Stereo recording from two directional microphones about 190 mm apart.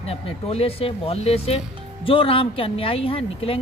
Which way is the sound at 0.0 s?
30° left (ahead or behind).